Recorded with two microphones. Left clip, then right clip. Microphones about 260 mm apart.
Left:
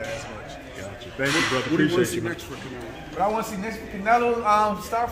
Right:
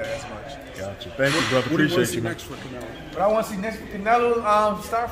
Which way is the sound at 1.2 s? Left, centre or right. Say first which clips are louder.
Right 2 dB; right.